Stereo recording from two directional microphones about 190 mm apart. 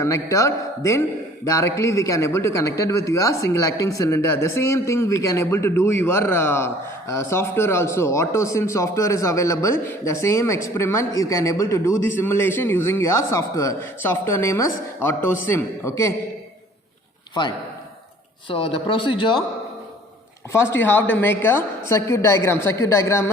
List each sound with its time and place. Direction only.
0.0 s speech: 15° left (ahead or behind)
18.4 s speech: 30° left (ahead or behind)
20.8 s speech: 10° left (ahead or behind)